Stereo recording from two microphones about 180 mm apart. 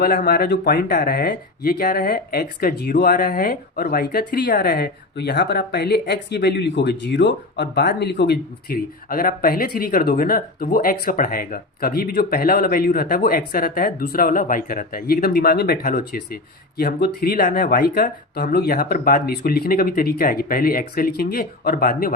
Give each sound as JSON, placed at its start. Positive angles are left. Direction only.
{"t": 0.0, "sound": "speech", "side_deg": 55}